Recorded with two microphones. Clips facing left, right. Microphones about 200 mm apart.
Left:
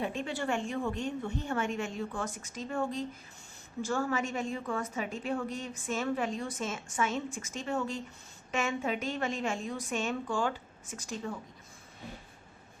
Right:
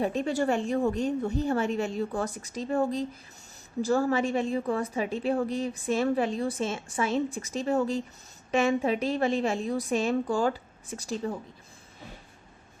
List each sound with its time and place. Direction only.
0.0 s a woman's voice: 40° right (ahead or behind)